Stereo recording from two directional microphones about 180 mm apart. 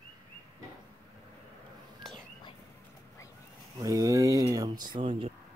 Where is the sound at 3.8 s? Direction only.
20° right (ahead or behind).